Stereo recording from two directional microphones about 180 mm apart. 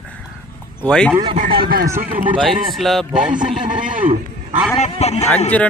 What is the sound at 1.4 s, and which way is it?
Speech, 55° right (ahead or behind).